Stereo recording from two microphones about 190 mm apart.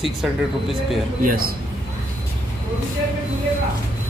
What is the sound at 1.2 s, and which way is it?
Speech, 50° right (ahead or behind).